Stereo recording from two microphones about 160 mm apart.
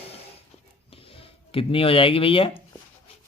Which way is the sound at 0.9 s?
35° left (ahead or behind).